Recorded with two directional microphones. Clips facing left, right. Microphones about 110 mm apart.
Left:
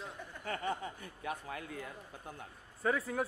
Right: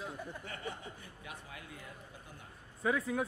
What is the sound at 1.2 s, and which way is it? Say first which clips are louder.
Speech: left 10 dB; 45° left (ahead or behind).